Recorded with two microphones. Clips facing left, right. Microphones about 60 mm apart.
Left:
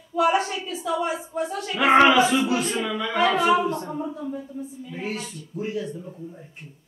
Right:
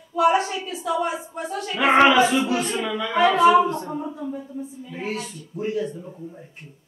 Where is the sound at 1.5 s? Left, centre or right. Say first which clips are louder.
Even; centre.